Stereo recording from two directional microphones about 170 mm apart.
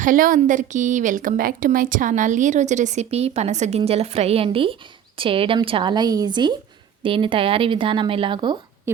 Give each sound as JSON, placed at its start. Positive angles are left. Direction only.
{"t": 0.0, "sound": "a woman's voice", "side_deg": -50}